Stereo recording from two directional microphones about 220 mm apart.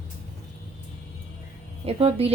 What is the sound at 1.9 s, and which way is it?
Speech, 25° right (ahead or behind).